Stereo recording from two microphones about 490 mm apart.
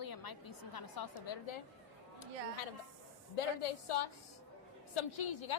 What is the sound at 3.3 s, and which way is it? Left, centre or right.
Speech, left.